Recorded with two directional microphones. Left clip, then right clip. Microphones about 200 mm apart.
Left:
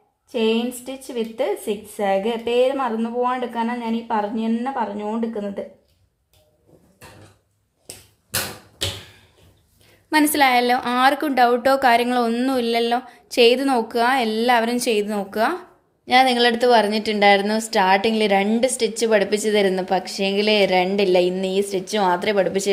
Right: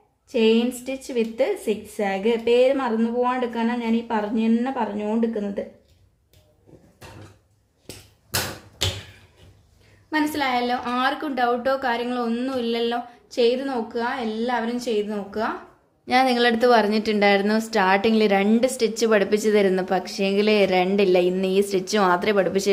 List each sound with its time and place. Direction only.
0.3 s a woman's voice: 15° left (ahead or behind)
10.1 s a woman's voice: 45° left (ahead or behind)
16.0 s a woman's voice: 5° left (ahead or behind)